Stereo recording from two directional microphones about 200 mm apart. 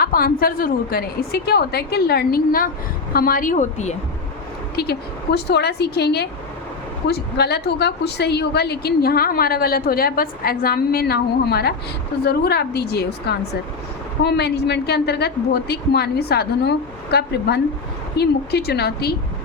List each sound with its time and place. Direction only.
0.0 s a woman's voice: 45° left (ahead or behind)
4.8 s a woman's voice: 55° left (ahead or behind)